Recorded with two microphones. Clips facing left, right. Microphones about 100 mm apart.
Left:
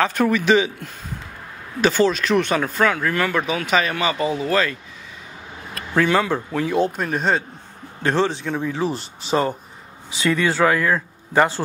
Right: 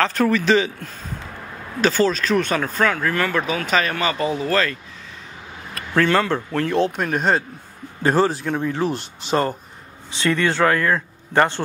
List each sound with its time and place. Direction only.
0.0 s speech: 15° left (ahead or behind)
3.4 s speech: 45° right (ahead or behind)
3.7 s speech: 10° left (ahead or behind)
5.9 s speech: 15° left (ahead or behind)
7.0 s speech: centre (ahead or behind)